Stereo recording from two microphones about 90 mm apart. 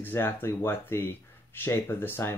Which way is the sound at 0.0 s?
25° left (ahead or behind).